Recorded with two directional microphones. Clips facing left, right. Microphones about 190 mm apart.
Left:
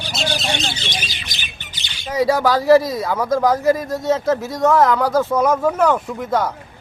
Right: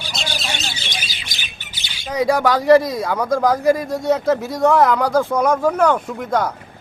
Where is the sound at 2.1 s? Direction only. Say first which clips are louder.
Even; 5° left (ahead or behind).